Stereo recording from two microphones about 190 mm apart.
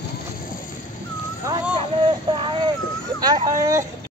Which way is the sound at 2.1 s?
25° right (ahead or behind).